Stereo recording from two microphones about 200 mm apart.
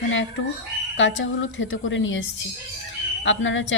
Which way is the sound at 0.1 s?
70° left (ahead or behind).